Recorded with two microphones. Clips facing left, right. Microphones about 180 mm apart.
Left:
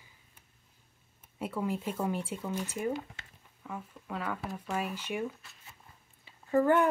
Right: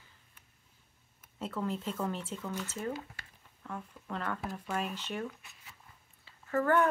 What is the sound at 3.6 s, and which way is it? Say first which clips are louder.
Speech: left 1 dB; 5° left (ahead or behind).